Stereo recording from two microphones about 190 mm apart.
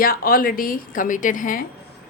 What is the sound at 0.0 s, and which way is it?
Speech, 50° left (ahead or behind).